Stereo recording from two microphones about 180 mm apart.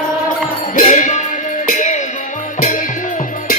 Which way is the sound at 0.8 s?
45° left (ahead or behind).